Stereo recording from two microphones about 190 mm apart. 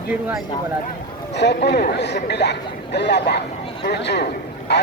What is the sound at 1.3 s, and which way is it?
A man's voice, 60° left (ahead or behind).